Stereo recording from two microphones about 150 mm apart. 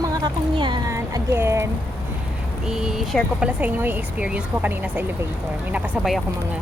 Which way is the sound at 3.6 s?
10° right (ahead or behind).